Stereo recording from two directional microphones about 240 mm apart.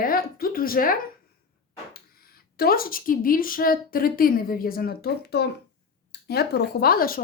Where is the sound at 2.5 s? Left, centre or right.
Left.